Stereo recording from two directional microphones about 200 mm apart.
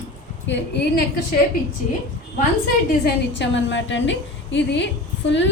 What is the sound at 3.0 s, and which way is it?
A woman's voice, 65° left (ahead or behind).